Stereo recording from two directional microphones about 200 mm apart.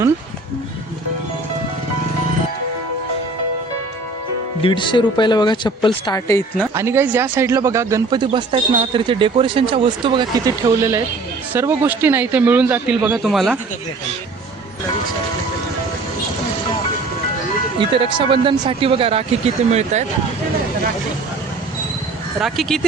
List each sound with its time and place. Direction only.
4.6 s speech: 25° left (ahead or behind)
6.7 s a man's voice: 10° right (ahead or behind)
17.7 s speech: 25° right (ahead or behind)
22.4 s speech: centre (ahead or behind)